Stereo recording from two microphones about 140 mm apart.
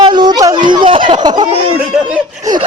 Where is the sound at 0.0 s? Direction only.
30° right (ahead or behind).